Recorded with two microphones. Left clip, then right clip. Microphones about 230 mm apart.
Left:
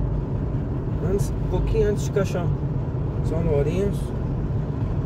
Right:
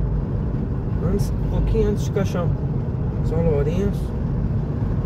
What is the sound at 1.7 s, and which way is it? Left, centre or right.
Speech, left.